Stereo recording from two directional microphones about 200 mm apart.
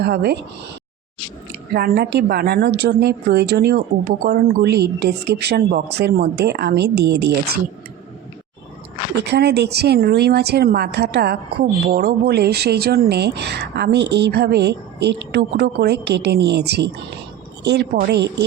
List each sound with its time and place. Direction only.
0.0 s speech: 55° right (ahead or behind)
1.7 s speech: 55° right (ahead or behind)
9.1 s speech: 55° right (ahead or behind)